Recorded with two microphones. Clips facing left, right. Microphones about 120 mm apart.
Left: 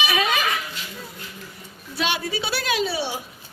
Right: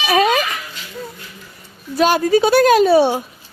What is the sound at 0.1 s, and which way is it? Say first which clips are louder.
Dog: right 9 dB; 40° right (ahead or behind).